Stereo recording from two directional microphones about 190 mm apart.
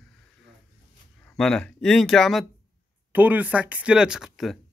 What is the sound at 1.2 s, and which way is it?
Speech, 5° left (ahead or behind).